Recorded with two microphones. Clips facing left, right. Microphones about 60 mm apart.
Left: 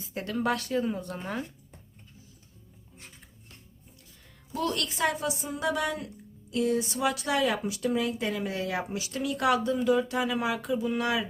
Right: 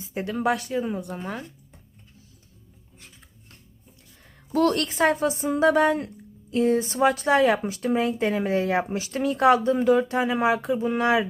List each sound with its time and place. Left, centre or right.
0.1 s speech: centre
4.2 s a woman's voice: right